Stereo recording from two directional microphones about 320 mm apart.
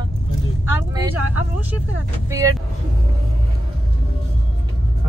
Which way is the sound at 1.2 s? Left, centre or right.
Left.